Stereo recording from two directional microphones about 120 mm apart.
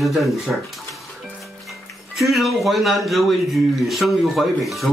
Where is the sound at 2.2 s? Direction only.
Centre (ahead or behind).